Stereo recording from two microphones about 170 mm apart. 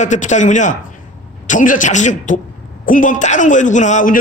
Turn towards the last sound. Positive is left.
turn(degrees=45)  # may be behind; listen again after turning